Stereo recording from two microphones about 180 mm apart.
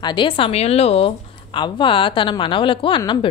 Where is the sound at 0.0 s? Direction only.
25° left (ahead or behind).